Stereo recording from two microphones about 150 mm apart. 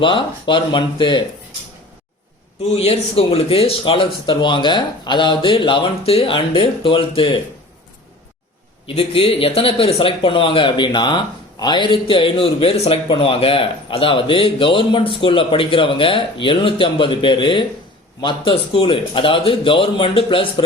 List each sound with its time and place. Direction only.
0.0 s a man's voice: 35° left (ahead or behind)
2.7 s a man's voice: 40° left (ahead or behind)
9.0 s a man's voice: 40° left (ahead or behind)